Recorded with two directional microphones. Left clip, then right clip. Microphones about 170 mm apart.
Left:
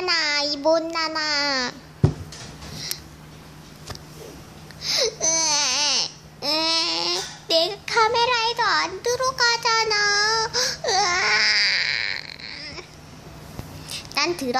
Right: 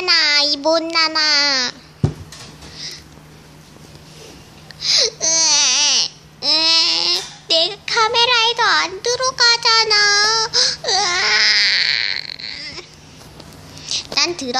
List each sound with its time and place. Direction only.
0.0 s a child's voice: centre (ahead or behind)
4.7 s babbling: centre (ahead or behind)
13.8 s a sound: centre (ahead or behind)